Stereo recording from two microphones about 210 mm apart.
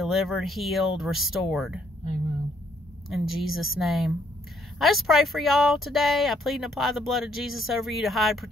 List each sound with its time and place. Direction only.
0.0 s speech: centre (ahead or behind)
3.1 s speech: centre (ahead or behind)